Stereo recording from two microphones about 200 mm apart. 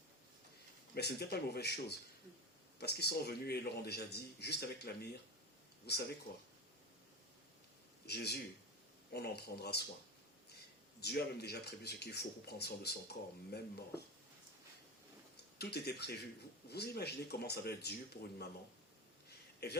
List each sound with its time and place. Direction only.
0.9 s a man's voice: 55° left (ahead or behind)
8.0 s a man's voice: 55° left (ahead or behind)
11.0 s a man's voice: 55° left (ahead or behind)
15.5 s a man's voice: 55° left (ahead or behind)
19.6 s a man's voice: 55° left (ahead or behind)